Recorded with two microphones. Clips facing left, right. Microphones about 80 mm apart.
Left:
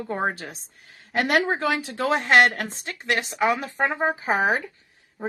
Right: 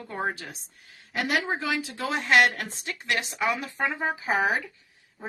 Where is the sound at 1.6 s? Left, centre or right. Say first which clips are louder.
Left 6 dB; left.